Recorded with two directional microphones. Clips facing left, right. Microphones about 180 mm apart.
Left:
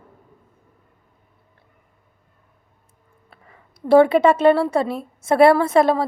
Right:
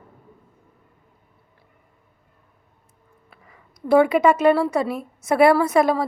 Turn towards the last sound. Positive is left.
turn(degrees=30)  # may be behind; listen again after turning